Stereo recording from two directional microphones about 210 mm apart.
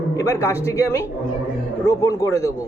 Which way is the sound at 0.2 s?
15° left (ahead or behind).